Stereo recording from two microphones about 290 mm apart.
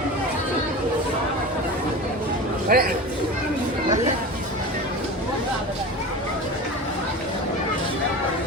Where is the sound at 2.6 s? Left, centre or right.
Right.